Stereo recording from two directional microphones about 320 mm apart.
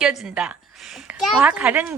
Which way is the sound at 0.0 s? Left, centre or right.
Centre.